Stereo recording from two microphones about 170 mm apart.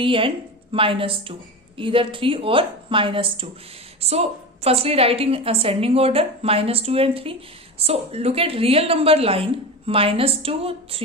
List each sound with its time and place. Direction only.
0.0 s a woman's voice: 30° right (ahead or behind)